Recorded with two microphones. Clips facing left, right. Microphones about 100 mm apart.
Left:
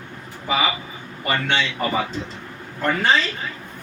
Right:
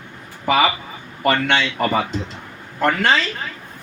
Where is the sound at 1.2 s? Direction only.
70° right (ahead or behind).